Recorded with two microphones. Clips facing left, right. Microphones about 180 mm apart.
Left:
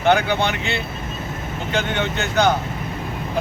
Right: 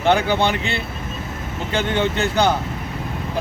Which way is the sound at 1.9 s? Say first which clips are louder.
Right 2 dB; 35° right (ahead or behind).